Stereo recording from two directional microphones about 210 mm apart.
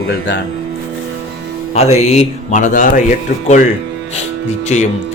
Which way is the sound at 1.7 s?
30° left (ahead or behind).